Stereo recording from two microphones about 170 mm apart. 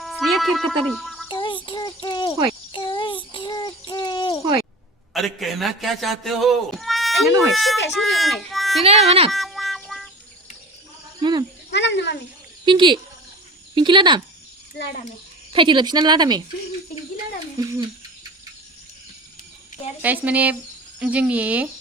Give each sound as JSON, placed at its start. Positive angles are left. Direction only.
{"t": 0.0, "sound": "a sound", "side_deg": 0}
{"t": 1.3, "sound": "a sound", "side_deg": 30}
{"t": 5.1, "sound": "speech", "side_deg": 0}
{"t": 8.8, "sound": "speech", "side_deg": -35}
{"t": 9.3, "sound": "music", "side_deg": 0}
{"t": 11.2, "sound": "cricket", "side_deg": -25}
{"t": 11.7, "sound": "a sound", "side_deg": 90}
{"t": 12.6, "sound": "speech", "side_deg": -30}
{"t": 14.8, "sound": "a child's voice", "side_deg": 85}
{"t": 15.5, "sound": "speech", "side_deg": -30}
{"t": 17.6, "sound": "a sound", "side_deg": -20}
{"t": 20.0, "sound": "speech", "side_deg": -10}